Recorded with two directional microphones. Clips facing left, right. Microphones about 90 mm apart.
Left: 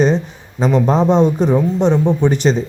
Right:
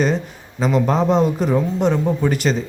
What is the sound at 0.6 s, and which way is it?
Speech, 30° left (ahead or behind).